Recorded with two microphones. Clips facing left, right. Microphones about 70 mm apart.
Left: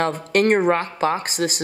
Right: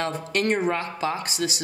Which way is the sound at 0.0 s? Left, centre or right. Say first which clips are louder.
Left 6 dB; left.